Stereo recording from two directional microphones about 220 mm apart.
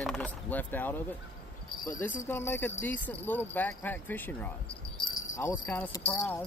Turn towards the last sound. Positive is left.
turn(degrees=10)  # may be behind; listen again after turning